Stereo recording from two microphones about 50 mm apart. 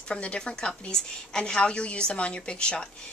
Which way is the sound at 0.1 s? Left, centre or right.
Left.